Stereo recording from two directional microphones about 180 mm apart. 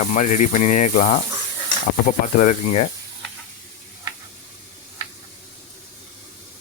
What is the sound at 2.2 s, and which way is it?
Speech, 45° left (ahead or behind).